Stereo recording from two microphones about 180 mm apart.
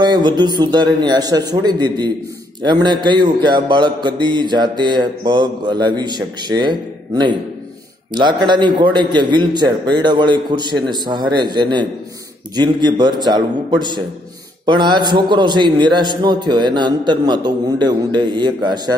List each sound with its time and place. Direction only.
0.0 s speech: 25° right (ahead or behind)